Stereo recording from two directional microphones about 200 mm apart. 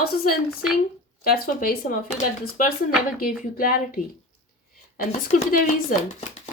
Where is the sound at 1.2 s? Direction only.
45° left (ahead or behind).